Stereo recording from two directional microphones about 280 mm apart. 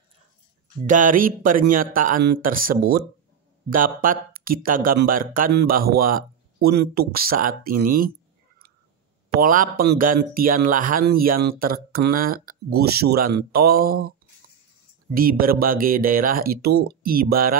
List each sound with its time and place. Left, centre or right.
0.8 s speech: right
9.4 s speech: right
15.1 s speech: right